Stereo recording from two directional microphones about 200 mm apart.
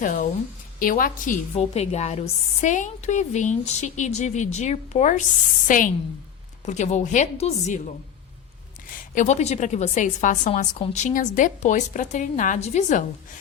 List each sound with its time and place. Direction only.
0.0 s a woman's voice: 40° left (ahead or behind)
9.1 s a woman's voice: 35° left (ahead or behind)